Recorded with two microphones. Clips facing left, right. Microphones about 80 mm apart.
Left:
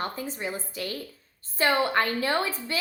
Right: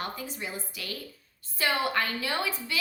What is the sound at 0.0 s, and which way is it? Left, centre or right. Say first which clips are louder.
A woman's voice: left 4 dB; left.